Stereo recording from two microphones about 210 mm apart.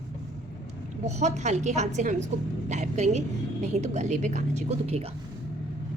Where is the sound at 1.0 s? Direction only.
35° right (ahead or behind).